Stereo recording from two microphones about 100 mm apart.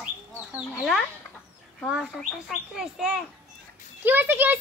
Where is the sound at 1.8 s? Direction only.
5° right (ahead or behind).